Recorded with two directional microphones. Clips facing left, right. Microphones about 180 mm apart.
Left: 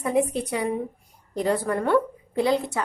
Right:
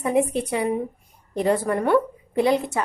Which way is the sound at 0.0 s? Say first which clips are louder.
Right 2 dB; 20° right (ahead or behind).